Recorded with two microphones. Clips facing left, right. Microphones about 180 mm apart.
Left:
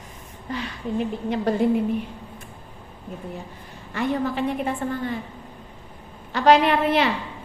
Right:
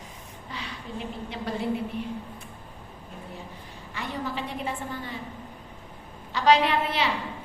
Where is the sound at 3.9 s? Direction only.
55° left (ahead or behind).